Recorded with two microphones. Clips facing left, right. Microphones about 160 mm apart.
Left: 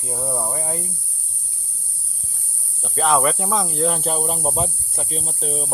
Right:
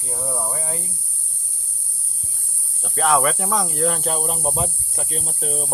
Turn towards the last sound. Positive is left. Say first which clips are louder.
# left 1 dB
turn(degrees=-5)  # may be behind; listen again after turning